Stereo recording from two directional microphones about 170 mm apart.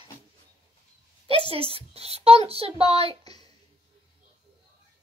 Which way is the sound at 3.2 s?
25° left (ahead or behind).